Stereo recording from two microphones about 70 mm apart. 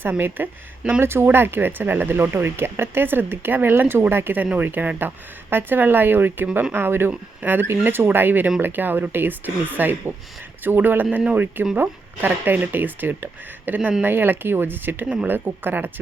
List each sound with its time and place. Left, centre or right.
0.0 s speech: right